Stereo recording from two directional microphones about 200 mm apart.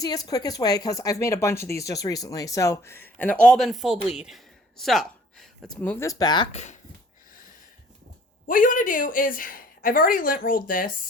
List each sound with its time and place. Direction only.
0.0 s speech: 20° left (ahead or behind); by 6.7 s 35° left (ahead or behind)
8.4 s speech: 40° left (ahead or behind)